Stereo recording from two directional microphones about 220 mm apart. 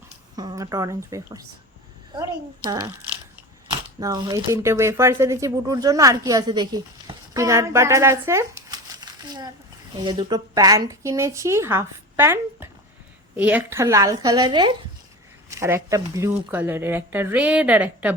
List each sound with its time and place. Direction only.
0.3 s speech: 15° right (ahead or behind)
2.6 s speech: 20° right (ahead or behind)